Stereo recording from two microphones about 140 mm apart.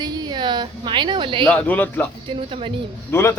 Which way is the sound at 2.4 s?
40° right (ahead or behind).